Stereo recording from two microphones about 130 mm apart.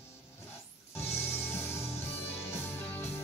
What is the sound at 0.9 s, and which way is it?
Music, 20° left (ahead or behind).